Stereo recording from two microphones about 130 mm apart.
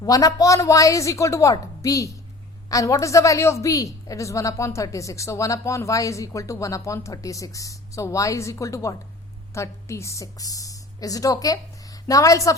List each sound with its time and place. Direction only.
0.0 s a woman's voice: 30° left (ahead or behind)